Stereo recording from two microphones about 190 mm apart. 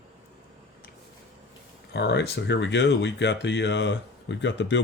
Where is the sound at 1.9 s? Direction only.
60° left (ahead or behind).